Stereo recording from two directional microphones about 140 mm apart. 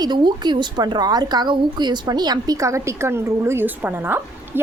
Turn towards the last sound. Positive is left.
turn(degrees=-15)  # may be behind; listen again after turning